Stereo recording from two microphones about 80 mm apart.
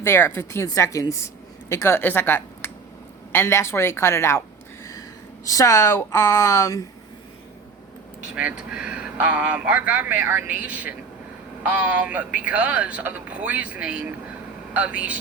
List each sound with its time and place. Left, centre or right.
0.0 s a woman's voice: left
0.7 s a woman's voice: left
8.4 s speech: centre